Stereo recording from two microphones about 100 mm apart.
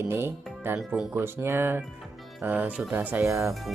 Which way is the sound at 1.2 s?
25° right (ahead or behind).